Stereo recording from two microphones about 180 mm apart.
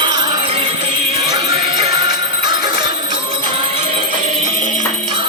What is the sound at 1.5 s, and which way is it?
Music, 35° right (ahead or behind).